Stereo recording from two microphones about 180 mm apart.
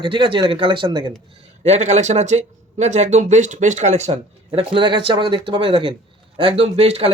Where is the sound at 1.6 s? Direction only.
40° right (ahead or behind).